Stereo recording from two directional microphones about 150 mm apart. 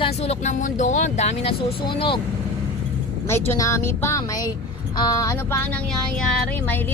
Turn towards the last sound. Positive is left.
turn(degrees=5)  # may be behind; listen again after turning